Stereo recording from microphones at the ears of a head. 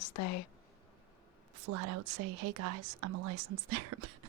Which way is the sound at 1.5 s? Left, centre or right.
Right.